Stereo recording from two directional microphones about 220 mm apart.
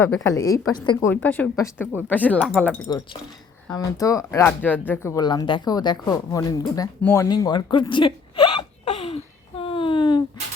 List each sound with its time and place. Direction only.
0.0 s a woman's voice: 5° left (ahead or behind)
0.3 s speech: 15° left (ahead or behind)
2.8 s speech: 20° left (ahead or behind)